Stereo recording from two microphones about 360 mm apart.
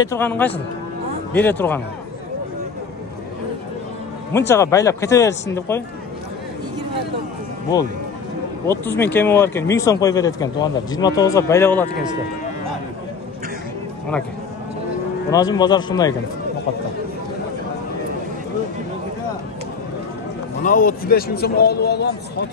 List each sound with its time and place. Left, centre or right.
0.0 s a man's voice: centre
4.3 s a man's voice: centre
8.6 s a man's voice: centre
15.3 s a man's voice: centre
20.6 s a man's voice: left